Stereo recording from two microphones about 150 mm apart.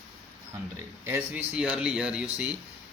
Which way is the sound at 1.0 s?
15° right (ahead or behind).